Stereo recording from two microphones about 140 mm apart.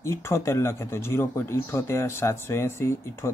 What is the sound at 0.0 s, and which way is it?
Speech, 20° left (ahead or behind).